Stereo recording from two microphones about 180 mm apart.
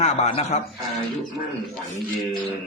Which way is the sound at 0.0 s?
35° left (ahead or behind).